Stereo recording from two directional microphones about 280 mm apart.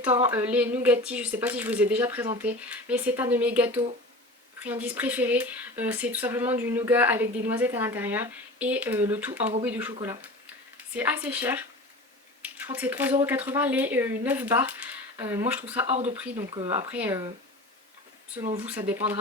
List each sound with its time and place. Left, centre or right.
0.0 s speech: centre
15.9 s speech: right
16.9 s speech: centre
18.9 s speech: centre